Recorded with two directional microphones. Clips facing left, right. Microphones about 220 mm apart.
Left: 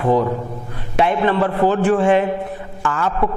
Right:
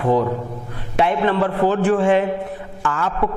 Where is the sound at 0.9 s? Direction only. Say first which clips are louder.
Left 1 dB; 15° left (ahead or behind).